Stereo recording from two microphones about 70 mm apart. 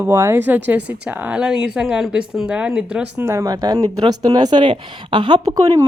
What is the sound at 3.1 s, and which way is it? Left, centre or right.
Speech, right.